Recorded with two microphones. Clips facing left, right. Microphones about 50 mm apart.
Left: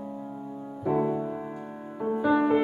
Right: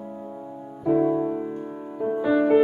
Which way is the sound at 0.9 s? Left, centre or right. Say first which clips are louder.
Right 6 dB; centre.